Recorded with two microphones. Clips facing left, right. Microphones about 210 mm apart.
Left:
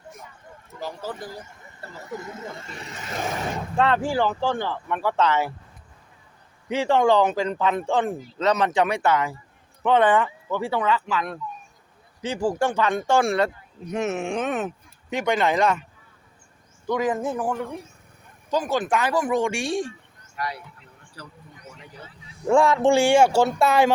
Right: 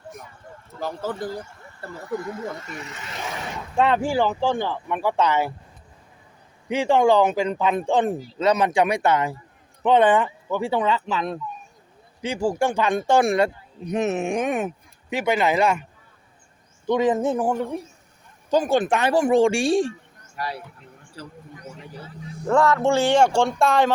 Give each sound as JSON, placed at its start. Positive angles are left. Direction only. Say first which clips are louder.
{"t": 0.8, "sound": "speech", "louder": "right 4 dB", "side_deg": -55}
{"t": 2.0, "sound": "speech", "louder": "right 6 dB", "side_deg": 20}
{"t": 3.8, "sound": "speech", "louder": "right 2 dB", "side_deg": -15}
{"t": 6.7, "sound": "speech", "louder": "right 1 dB", "side_deg": -15}
{"t": 12.2, "sound": "speech", "louder": "right 1 dB", "side_deg": -10}
{"t": 16.8, "sound": "speech", "louder": "right 4 dB", "side_deg": -25}
{"t": 22.4, "sound": "speech", "louder": "left 1 dB", "side_deg": 10}